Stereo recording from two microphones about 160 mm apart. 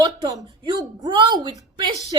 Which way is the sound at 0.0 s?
25° right (ahead or behind).